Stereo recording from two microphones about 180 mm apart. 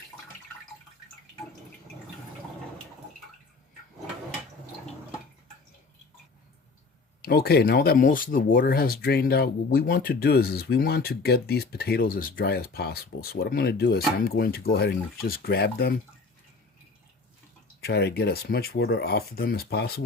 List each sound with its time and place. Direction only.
7.2 s speech: 60° left (ahead or behind)
17.7 s speech: 65° left (ahead or behind)